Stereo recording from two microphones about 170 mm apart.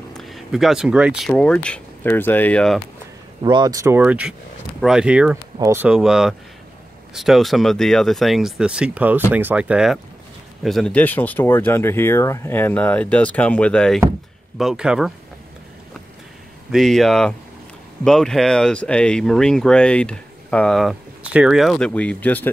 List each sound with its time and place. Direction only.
0.1 s speech: centre (ahead or behind)
1.3 s speech: 5° left (ahead or behind)
3.4 s speech: 25° right (ahead or behind); by 5.4 s 5° right (ahead or behind)
5.6 s speech: 15° right (ahead or behind)
5.9 s speech: 5° right (ahead or behind)
16.7 s speech: centre (ahead or behind)